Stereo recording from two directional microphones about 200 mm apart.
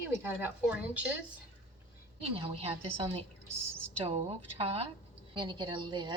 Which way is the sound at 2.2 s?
30° right (ahead or behind).